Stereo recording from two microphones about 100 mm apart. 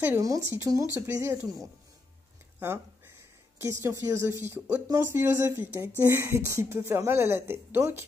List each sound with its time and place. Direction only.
0.2 s speech: 30° right (ahead or behind)
3.5 s speech: 30° right (ahead or behind)